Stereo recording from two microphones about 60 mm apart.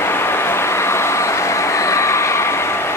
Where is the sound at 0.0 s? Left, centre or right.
Left.